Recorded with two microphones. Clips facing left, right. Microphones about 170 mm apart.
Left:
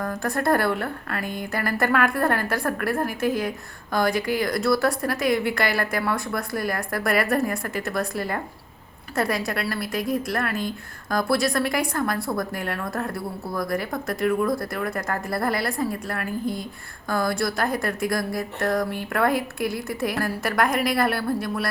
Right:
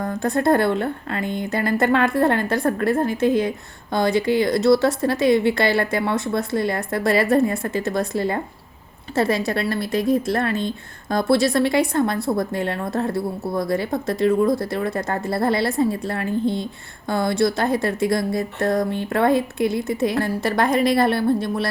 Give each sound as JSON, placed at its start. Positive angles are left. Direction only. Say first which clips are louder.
{"t": 0.0, "sound": "speech", "louder": "right 4 dB", "side_deg": -20}